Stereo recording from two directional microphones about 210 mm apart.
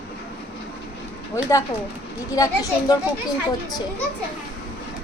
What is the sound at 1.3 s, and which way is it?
A child's voice, 15° left (ahead or behind).